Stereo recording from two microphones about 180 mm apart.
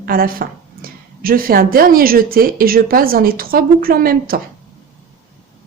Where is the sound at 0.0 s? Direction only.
55° right (ahead or behind).